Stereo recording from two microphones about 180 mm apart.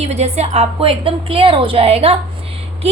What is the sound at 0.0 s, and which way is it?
A woman's voice, 35° right (ahead or behind).